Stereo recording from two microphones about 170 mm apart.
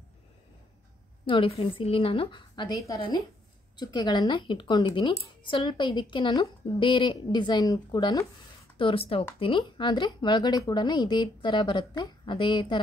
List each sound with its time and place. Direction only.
1.2 s a woman's voice: 30° left (ahead or behind)